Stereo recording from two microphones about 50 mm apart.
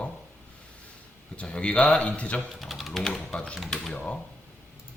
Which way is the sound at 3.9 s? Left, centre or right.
Left.